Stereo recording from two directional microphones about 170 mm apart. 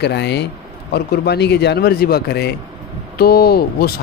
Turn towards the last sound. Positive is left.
turn(degrees=65)  # may be behind; listen again after turning